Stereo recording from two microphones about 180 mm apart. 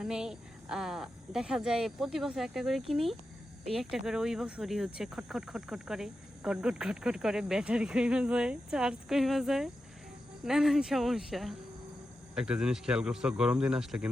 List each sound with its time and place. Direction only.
0.0 s speech: 5° right (ahead or behind)